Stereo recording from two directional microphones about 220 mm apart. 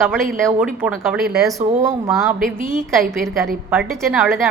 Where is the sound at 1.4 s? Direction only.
15° right (ahead or behind).